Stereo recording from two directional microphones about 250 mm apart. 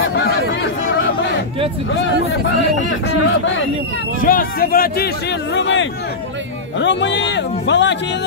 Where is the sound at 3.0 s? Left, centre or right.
Left.